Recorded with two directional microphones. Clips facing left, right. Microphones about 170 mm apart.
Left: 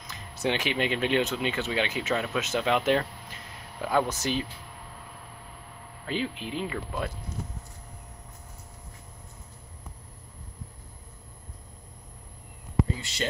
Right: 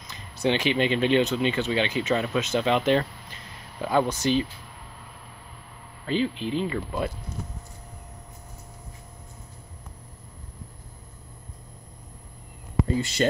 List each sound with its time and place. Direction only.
0.0 s speech: 5° left (ahead or behind)
6.0 s speech: 5° left (ahead or behind)
12.8 s speech: 45° right (ahead or behind)